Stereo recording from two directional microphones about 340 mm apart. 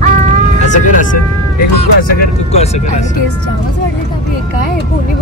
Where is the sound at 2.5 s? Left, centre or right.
Centre.